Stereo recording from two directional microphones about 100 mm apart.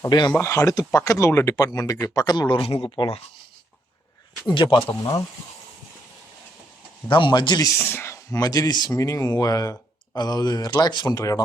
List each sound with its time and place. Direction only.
0.1 s speech: 45° left (ahead or behind)
0.3 s speech: 30° left (ahead or behind)
1.5 s speech: 40° left (ahead or behind)
2.6 s speech: 70° left (ahead or behind)
2.9 s speech: 50° left (ahead or behind)
4.5 s speech: 50° left (ahead or behind)
7.1 s speech: 50° left (ahead or behind)
7.8 s speech: 25° left (ahead or behind); by 11.4 s 40° left (ahead or behind)